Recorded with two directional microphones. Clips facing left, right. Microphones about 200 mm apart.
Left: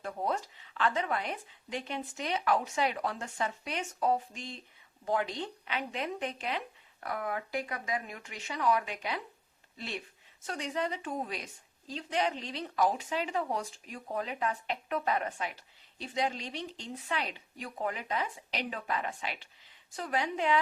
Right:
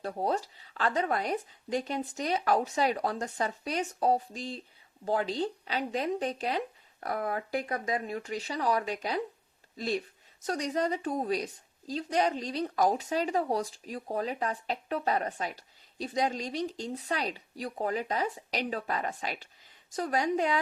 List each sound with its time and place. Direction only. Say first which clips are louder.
0.0 s speech: right 3 dB; 35° right (ahead or behind)